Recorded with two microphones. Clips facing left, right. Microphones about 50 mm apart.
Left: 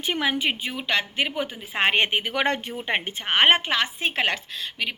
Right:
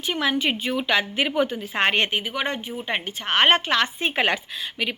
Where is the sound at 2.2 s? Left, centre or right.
Left.